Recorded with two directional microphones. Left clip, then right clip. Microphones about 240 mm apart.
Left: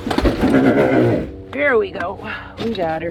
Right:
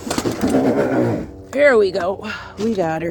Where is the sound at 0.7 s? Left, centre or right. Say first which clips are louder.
Left 3 dB; left.